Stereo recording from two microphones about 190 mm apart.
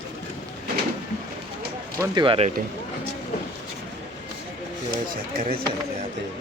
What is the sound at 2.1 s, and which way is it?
Speech, 25° right (ahead or behind).